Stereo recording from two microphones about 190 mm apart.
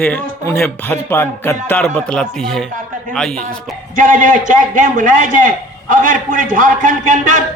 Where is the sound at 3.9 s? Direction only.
45° right (ahead or behind).